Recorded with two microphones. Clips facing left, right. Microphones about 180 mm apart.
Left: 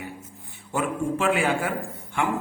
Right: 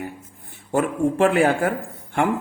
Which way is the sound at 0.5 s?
45° right (ahead or behind).